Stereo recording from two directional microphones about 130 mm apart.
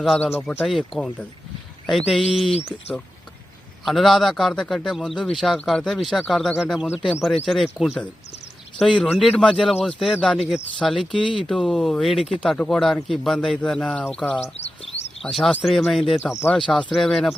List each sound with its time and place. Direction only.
0.0 s speech: centre (ahead or behind)
3.8 s speech: centre (ahead or behind)
9.0 s speech: 5° left (ahead or behind)